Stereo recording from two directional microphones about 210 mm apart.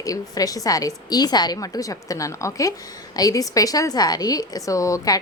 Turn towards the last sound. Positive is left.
turn(degrees=15)  # may be behind; listen again after turning